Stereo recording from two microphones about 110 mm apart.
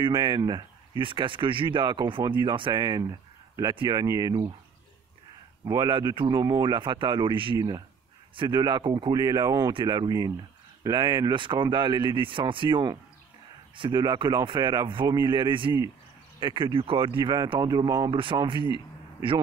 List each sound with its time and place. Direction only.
0.0 s speech: 45° right (ahead or behind)
4.0 s speech: 35° right (ahead or behind)
5.7 s speech: 40° right (ahead or behind)
18.1 s speech: 50° right (ahead or behind)